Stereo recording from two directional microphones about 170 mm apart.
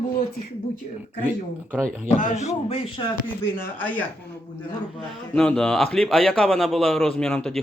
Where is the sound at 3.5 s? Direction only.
10° left (ahead or behind).